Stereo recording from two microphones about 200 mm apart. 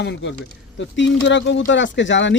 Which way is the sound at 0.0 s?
65° left (ahead or behind).